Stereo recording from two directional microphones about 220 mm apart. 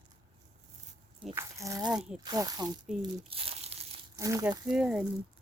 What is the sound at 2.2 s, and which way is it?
Speech, 15° right (ahead or behind).